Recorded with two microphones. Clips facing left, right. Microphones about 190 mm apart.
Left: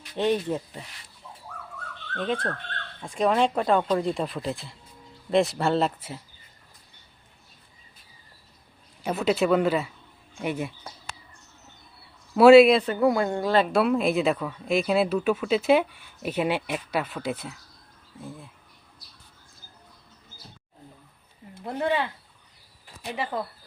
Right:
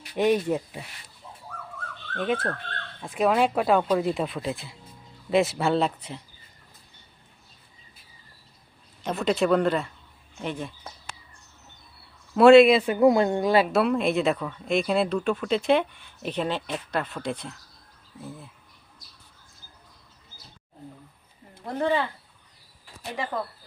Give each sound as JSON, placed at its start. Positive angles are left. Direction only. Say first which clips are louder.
{"t": 0.2, "sound": "speech", "louder": "right 2 dB", "side_deg": -10}
{"t": 2.1, "sound": "speech", "louder": "right 1 dB", "side_deg": -5}
{"t": 9.0, "sound": "speech", "louder": "even", "side_deg": 5}
{"t": 12.3, "sound": "speech", "louder": "left 1 dB", "side_deg": 0}
{"t": 12.8, "sound": "speech", "louder": "right 3 dB", "side_deg": -15}
{"t": 13.7, "sound": "speech", "louder": "even", "side_deg": 0}
{"t": 21.6, "sound": "speech", "louder": "right 1 dB", "side_deg": 10}